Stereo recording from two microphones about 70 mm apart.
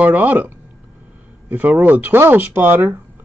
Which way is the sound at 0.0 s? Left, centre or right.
Right.